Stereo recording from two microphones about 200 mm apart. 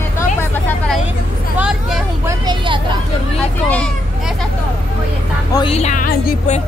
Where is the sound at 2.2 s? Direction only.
25° right (ahead or behind).